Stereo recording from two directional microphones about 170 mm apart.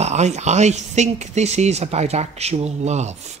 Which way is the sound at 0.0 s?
40° right (ahead or behind).